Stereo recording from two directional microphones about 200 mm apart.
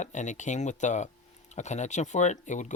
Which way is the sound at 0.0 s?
35° left (ahead or behind).